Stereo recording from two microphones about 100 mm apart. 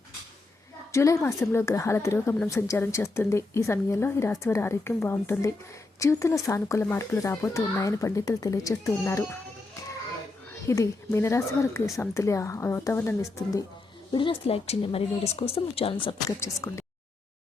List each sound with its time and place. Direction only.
0.9 s speech: 30° left (ahead or behind)
10.7 s speech: 30° left (ahead or behind)
14.1 s a woman's voice: 55° left (ahead or behind)
16.4 s speech: 25° left (ahead or behind)